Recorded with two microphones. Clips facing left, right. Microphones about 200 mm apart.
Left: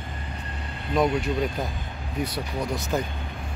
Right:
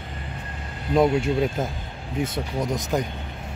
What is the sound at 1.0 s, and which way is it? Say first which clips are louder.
Speech: right 4 dB; 25° right (ahead or behind).